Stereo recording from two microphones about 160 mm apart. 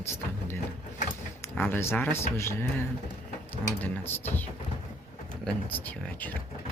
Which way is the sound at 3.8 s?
15° left (ahead or behind).